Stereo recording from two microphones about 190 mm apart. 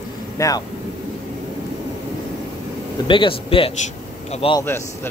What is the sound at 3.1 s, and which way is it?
A man's voice, 25° left (ahead or behind).